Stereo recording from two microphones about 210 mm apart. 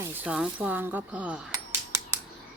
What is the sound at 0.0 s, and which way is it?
Speech, 10° right (ahead or behind).